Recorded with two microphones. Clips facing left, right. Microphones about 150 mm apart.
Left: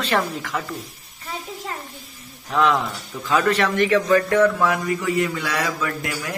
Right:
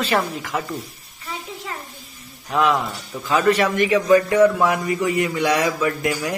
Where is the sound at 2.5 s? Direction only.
10° right (ahead or behind).